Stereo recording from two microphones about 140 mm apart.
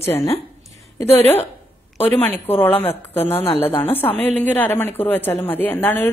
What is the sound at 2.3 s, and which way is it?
Speech, 15° left (ahead or behind).